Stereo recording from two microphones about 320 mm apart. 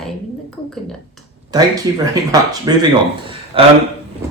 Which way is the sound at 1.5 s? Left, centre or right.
Centre.